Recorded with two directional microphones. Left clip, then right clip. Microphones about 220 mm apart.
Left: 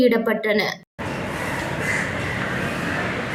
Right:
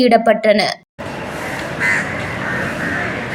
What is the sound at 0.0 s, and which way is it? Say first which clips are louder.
Speech: right 7 dB; 25° right (ahead or behind).